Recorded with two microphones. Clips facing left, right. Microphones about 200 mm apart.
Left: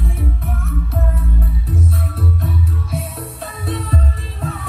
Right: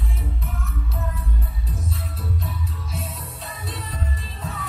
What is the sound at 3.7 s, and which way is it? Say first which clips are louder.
Music: left 11 dB; 60° left (ahead or behind).